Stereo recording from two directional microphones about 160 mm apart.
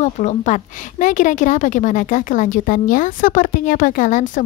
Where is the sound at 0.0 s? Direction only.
45° left (ahead or behind).